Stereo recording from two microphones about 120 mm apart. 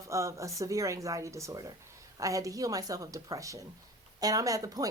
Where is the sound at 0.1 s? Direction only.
25° right (ahead or behind).